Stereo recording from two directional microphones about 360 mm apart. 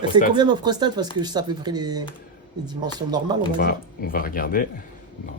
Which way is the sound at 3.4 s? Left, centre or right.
Left.